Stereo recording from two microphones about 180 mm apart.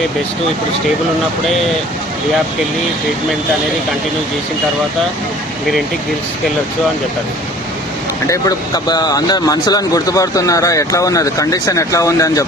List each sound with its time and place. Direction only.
8.3 s speech: 20° left (ahead or behind)